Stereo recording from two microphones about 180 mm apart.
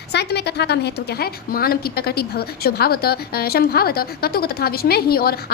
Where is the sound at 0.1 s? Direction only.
65° left (ahead or behind).